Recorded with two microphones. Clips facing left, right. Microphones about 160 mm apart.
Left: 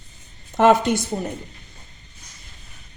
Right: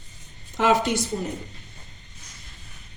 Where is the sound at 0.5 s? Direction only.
50° left (ahead or behind).